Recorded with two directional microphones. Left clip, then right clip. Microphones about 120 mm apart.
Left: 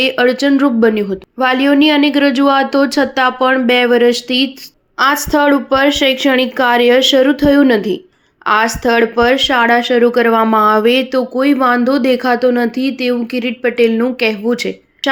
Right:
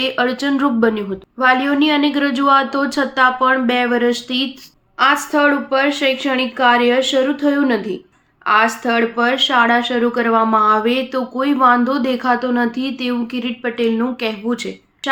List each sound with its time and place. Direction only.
0.0 s speech: 35° left (ahead or behind)
4.9 s speech: 50° left (ahead or behind)